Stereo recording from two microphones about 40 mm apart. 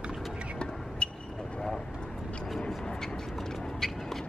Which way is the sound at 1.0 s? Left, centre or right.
Left.